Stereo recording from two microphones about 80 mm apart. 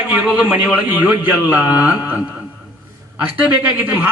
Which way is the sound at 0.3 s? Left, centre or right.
Centre.